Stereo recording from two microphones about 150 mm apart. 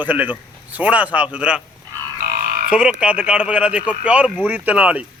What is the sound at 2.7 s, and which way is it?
Speech, 5° right (ahead or behind).